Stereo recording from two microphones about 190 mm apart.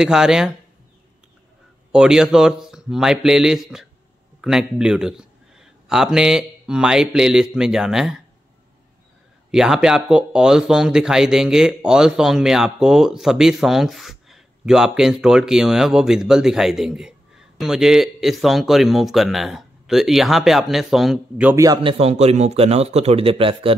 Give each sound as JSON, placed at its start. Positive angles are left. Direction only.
{"t": 0.0, "sound": "speech", "side_deg": -5}
{"t": 1.9, "sound": "speech", "side_deg": -5}
{"t": 9.5, "sound": "speech", "side_deg": -5}
{"t": 21.8, "sound": "speech", "side_deg": -30}